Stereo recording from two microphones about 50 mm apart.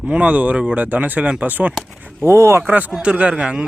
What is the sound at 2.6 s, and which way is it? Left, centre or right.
Speech, right.